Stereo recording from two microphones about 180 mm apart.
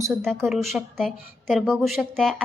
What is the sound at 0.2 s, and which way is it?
A woman's voice, centre (ahead or behind).